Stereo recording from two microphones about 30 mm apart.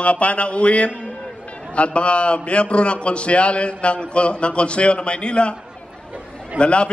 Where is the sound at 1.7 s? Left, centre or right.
Left.